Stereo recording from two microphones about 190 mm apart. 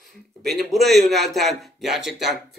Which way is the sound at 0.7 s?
Centre (ahead or behind).